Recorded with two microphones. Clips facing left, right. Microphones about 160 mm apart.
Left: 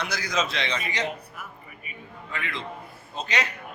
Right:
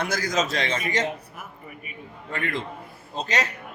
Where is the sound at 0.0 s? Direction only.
45° right (ahead or behind).